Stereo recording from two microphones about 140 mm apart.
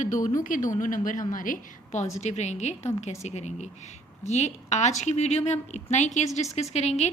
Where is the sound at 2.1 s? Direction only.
55° left (ahead or behind).